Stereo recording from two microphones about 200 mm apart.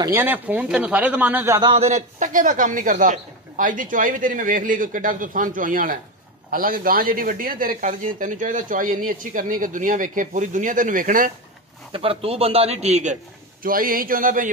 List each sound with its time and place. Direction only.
0.0 s speech: 10° right (ahead or behind)
1.7 s a man's voice: 30° right (ahead or behind)
11.9 s a man's voice: 30° right (ahead or behind)